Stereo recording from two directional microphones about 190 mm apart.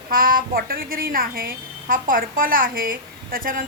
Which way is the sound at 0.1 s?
50° right (ahead or behind).